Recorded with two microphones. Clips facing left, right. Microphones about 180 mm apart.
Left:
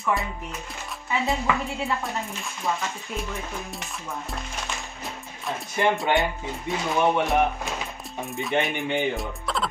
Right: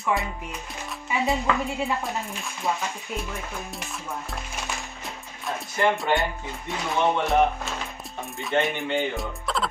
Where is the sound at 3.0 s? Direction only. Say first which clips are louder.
Even; centre (ahead or behind).